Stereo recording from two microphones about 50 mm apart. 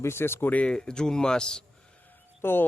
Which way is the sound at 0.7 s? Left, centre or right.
Centre.